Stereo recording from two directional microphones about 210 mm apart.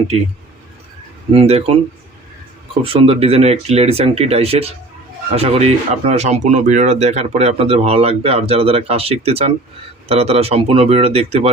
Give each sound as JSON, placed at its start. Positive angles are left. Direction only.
{"t": 1.3, "sound": "speech", "side_deg": -30}
{"t": 2.8, "sound": "speech", "side_deg": -25}